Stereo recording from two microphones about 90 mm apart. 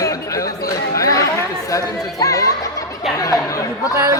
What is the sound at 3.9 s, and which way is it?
Speech, 30° right (ahead or behind).